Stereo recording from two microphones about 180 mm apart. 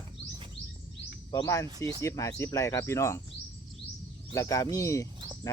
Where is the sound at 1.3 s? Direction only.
20° left (ahead or behind).